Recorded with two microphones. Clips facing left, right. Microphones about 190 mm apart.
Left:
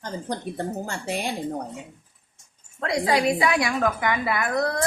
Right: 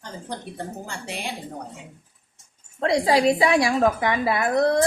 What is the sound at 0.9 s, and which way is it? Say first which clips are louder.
Speech: left 4 dB; 45° left (ahead or behind).